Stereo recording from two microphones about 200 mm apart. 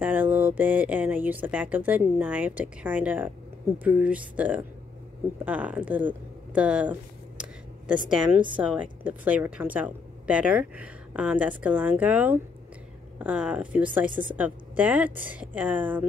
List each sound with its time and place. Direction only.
0.0 s a woman's voice: 10° right (ahead or behind)